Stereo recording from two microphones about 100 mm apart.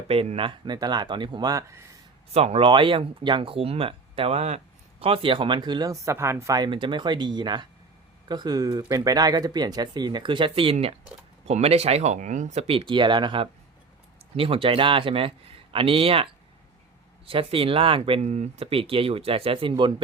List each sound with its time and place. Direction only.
0.1 s speech: 75° right (ahead or behind); by 1.6 s 45° right (ahead or behind)
2.3 s speech: 90° right
2.6 s speech: 55° right (ahead or behind)
5.9 s speech: 30° right (ahead or behind)
6.6 s speech: 55° right (ahead or behind); by 10.9 s 75° right (ahead or behind)
11.4 s speech: 90° right
12.5 s speech: 75° right (ahead or behind); by 19.9 s 55° right (ahead or behind)